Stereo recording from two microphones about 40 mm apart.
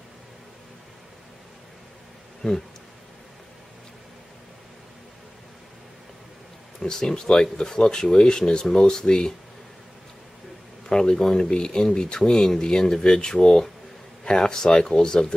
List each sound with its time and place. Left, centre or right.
6.8 s speech: centre
10.9 s speech: centre